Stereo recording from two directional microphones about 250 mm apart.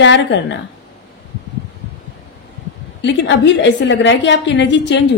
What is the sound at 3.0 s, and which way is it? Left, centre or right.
A woman's voice, left.